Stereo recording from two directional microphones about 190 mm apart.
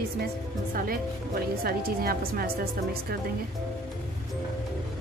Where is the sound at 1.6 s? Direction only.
50° right (ahead or behind).